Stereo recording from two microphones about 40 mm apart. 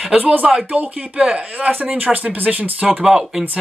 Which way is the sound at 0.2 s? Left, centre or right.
Right.